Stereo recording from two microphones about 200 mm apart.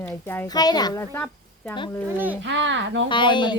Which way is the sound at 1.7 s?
25° left (ahead or behind).